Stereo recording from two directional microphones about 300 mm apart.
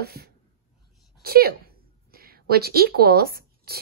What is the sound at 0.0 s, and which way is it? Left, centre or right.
A woman's voice, right.